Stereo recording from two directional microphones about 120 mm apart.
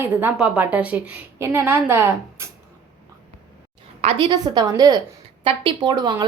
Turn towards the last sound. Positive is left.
turn(degrees=-35)  # may be behind; listen again after turning